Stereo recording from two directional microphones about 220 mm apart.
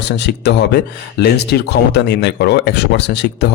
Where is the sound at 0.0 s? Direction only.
50° left (ahead or behind).